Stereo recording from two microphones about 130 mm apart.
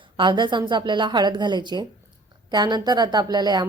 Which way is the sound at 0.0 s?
40° right (ahead or behind).